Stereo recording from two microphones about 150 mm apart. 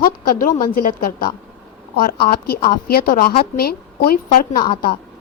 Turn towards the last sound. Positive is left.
turn(degrees=75)  # may be behind; listen again after turning